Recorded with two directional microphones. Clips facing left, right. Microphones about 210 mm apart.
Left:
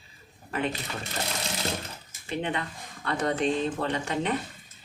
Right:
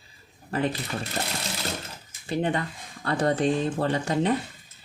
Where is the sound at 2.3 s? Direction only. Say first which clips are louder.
Right 4 dB; 40° right (ahead or behind).